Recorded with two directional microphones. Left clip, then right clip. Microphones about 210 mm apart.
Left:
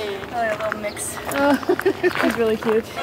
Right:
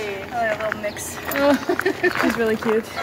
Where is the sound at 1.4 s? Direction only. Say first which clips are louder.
Even; 40° right (ahead or behind).